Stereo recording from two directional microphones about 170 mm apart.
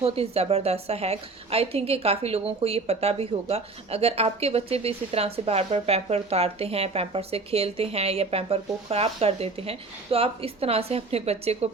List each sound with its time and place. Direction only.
0.0 s a woman's voice: 35° right (ahead or behind)